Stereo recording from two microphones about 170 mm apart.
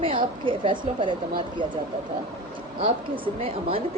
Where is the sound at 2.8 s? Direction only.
30° right (ahead or behind).